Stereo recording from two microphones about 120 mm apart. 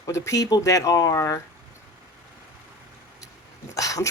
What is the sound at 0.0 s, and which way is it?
Speech, 25° left (ahead or behind).